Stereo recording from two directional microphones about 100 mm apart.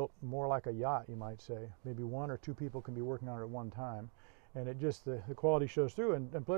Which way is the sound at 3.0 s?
25° left (ahead or behind).